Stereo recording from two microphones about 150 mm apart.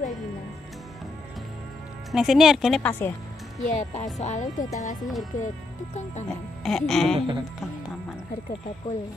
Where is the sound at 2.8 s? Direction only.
10° left (ahead or behind).